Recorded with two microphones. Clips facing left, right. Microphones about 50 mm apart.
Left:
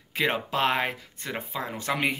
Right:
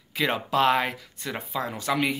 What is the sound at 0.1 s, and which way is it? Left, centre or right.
Speech, left.